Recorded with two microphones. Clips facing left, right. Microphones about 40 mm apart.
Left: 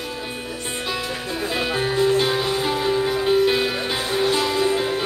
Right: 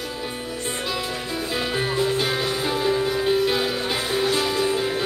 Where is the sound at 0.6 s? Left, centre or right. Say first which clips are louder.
Left 1 dB; centre.